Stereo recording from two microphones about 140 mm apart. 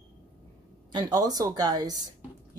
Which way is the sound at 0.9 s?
30° right (ahead or behind).